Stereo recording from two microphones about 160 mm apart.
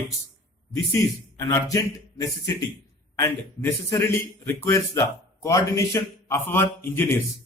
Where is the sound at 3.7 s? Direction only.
15° left (ahead or behind).